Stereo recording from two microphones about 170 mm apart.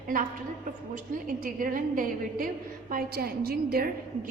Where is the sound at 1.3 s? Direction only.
55° right (ahead or behind).